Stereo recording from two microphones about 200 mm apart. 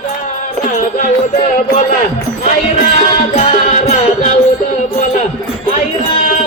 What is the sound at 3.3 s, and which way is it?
Music, 35° left (ahead or behind).